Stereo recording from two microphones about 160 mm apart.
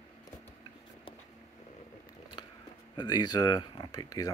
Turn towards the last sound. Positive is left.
turn(degrees=25)  # may be behind; listen again after turning